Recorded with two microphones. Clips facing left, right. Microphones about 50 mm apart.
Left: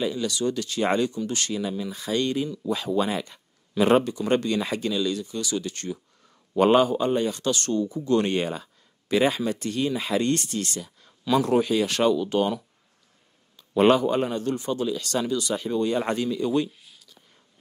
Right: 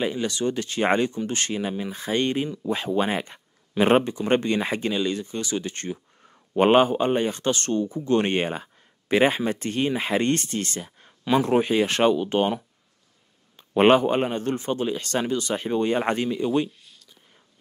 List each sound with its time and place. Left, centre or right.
0.0 s speech: right
16.4 s speech: right
16.8 s a sound: centre